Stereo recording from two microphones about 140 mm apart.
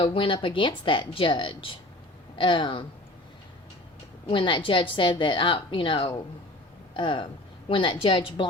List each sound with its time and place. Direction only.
0.0 s a woman's voice: 35° left (ahead or behind)
4.3 s a woman's voice: 35° left (ahead or behind)